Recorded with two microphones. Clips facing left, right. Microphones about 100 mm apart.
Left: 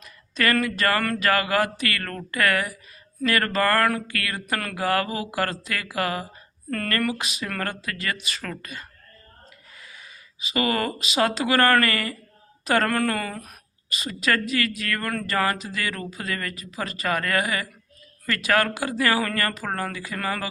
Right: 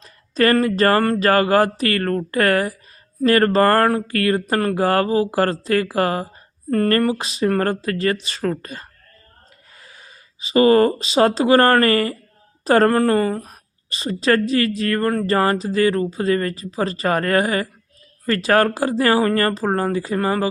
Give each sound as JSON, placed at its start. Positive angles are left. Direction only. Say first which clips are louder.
{"t": 0.0, "sound": "a woman's voice", "louder": "right 7 dB", "side_deg": -35}